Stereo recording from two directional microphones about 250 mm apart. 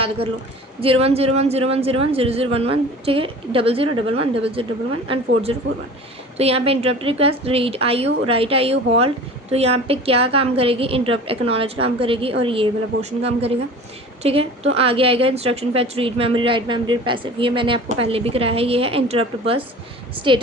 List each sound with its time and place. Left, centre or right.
0.8 s a woman's voice: right